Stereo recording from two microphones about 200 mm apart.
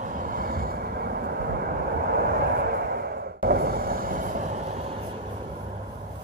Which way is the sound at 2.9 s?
50° right (ahead or behind).